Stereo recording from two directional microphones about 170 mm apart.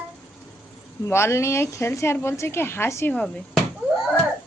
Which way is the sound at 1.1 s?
15° left (ahead or behind).